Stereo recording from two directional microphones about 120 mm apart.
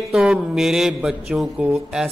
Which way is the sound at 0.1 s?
Centre (ahead or behind).